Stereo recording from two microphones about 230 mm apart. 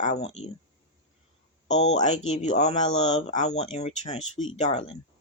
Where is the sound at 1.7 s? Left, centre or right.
Left.